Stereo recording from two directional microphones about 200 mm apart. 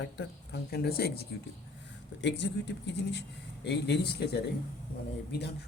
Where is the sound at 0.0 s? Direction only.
60° left (ahead or behind).